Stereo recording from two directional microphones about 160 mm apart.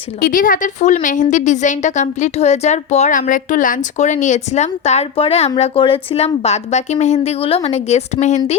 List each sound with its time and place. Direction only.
0.2 s a woman's voice: 60° left (ahead or behind)